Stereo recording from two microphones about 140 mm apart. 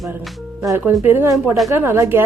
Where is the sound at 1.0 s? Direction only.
15° right (ahead or behind).